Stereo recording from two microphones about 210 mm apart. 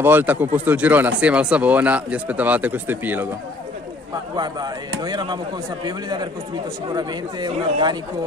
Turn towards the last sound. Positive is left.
turn(degrees=-20)  # may be behind; listen again after turning